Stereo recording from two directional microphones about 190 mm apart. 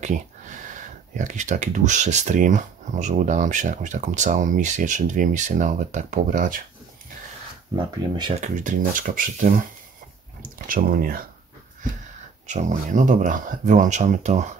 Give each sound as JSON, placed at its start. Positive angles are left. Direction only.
{"t": 0.0, "sound": "speech", "side_deg": -40}
{"t": 7.7, "sound": "speech", "side_deg": -25}
{"t": 8.4, "sound": "speech", "side_deg": -40}
{"t": 12.4, "sound": "speech", "side_deg": -40}